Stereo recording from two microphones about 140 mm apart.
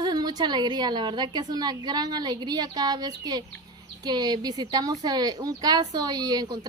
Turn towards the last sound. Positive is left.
turn(degrees=-30)  # may be behind; listen again after turning